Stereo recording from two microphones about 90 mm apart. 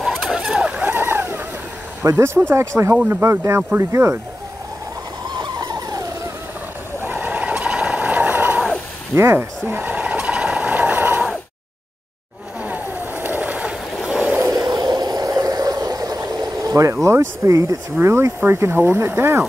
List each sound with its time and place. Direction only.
0.1 s vehicle: 5° right (ahead or behind)
0.9 s a sound: 25° right (ahead or behind)
2.0 s speech: 30° right (ahead or behind)
5.3 s vehicle: 55° right (ahead or behind); by 6.3 s 40° right (ahead or behind)
7.2 s vehicle: 15° right (ahead or behind)
12.6 s a sound: 20° right (ahead or behind)
14.0 s vehicle: 10° right (ahead or behind)
14.8 s a sound: 50° right (ahead or behind)
16.9 s speech: 35° right (ahead or behind)